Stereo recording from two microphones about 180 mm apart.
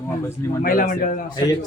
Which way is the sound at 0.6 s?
50° left (ahead or behind).